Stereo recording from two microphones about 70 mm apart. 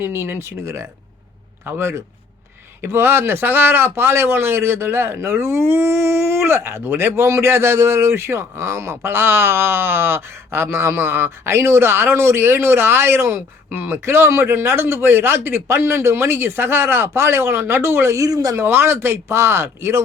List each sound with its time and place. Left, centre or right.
0.0 s speech: right
18.2 s speech: right
18.6 s speech: right